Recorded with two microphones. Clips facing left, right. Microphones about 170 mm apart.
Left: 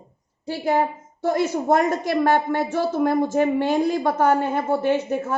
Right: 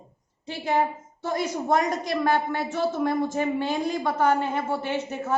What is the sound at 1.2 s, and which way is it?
Speech, 50° left (ahead or behind).